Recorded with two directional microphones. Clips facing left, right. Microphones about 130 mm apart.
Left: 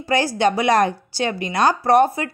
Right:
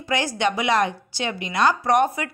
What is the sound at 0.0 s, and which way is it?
A woman's voice, 35° left (ahead or behind).